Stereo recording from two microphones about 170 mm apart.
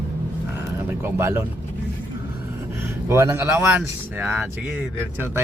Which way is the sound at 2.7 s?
15° right (ahead or behind).